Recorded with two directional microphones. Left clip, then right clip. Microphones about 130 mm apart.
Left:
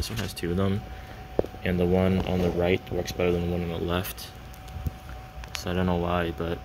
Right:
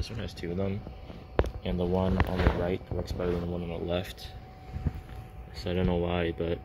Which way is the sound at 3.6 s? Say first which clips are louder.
Left 3 dB; 20° left (ahead or behind).